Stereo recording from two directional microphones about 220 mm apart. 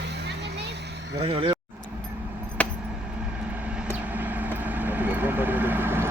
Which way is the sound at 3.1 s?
5° right (ahead or behind).